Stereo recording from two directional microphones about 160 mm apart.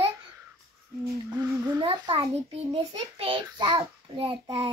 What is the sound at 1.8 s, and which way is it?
A child's voice, 30° right (ahead or behind).